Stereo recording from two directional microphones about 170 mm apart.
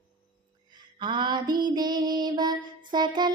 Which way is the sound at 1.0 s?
25° right (ahead or behind).